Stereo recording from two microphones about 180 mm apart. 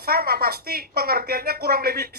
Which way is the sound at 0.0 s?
55° right (ahead or behind).